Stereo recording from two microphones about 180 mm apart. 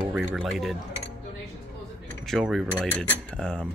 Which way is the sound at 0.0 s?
10° right (ahead or behind).